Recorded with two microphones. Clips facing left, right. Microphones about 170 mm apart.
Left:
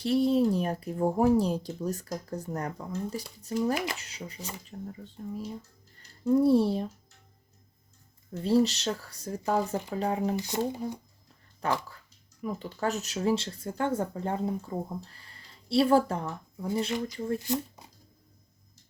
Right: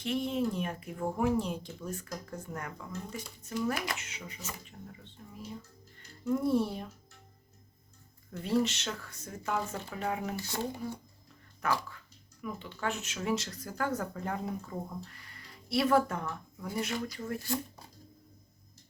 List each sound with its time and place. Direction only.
0.0 s speech: 35° left (ahead or behind)
6.2 s speech: 30° left (ahead or behind)
8.3 s speech: 30° left (ahead or behind)
10.3 s speech: 15° left (ahead or behind)
11.6 s speech: 30° left (ahead or behind)